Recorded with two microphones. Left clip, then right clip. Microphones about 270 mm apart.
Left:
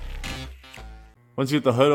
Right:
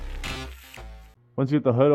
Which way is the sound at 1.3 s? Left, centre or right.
Centre.